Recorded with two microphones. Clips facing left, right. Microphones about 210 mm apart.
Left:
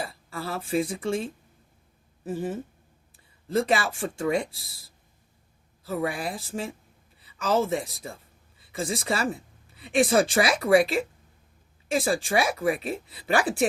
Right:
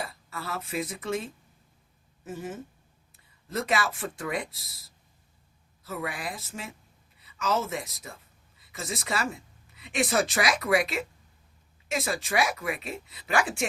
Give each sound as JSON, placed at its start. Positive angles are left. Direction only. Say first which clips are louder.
{"t": 0.0, "sound": "speech", "louder": "left 3 dB", "side_deg": 30}
{"t": 2.2, "sound": "speech", "louder": "left 6 dB", "side_deg": 30}
{"t": 5.8, "sound": "a woman's voice", "louder": "left 6 dB", "side_deg": 30}